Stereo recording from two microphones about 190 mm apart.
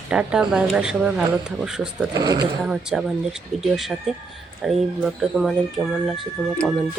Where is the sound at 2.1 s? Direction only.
20° right (ahead or behind).